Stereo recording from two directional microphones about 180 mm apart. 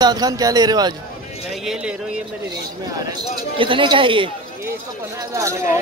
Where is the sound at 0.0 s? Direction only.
20° right (ahead or behind).